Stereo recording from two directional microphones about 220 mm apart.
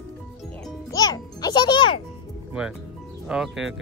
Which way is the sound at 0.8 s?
15° left (ahead or behind).